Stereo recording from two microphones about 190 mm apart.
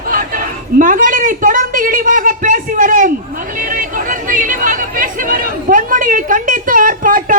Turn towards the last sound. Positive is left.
turn(degrees=-45)  # may be behind; listen again after turning